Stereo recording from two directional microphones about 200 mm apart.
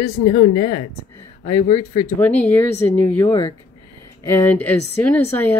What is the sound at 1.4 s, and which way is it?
Speech, 30° left (ahead or behind).